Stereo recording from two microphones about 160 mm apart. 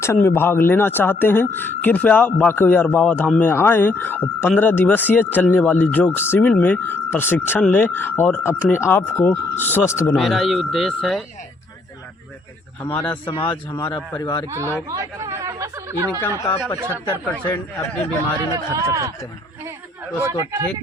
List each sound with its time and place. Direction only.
0.0 s speech: 15° left (ahead or behind)
10.2 s speech: centre (ahead or behind)
12.8 s speech: 10° left (ahead or behind)
13.1 s speech: 30° left (ahead or behind)
13.7 s speech: 15° left (ahead or behind)
14.4 s speech: 20° right (ahead or behind)
16.4 s speech: 25° left (ahead or behind)
17.5 s speech: 15° left (ahead or behind)
18.5 s speech: 20° right (ahead or behind)